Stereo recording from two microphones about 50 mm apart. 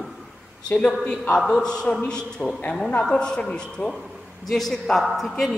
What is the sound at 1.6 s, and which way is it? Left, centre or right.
A man's voice, centre.